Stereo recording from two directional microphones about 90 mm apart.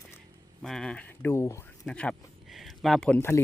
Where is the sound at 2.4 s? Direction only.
Centre (ahead or behind).